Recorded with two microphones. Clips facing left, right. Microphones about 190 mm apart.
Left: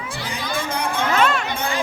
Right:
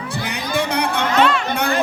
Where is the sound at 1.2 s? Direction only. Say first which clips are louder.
Right 4 dB; 45° left (ahead or behind).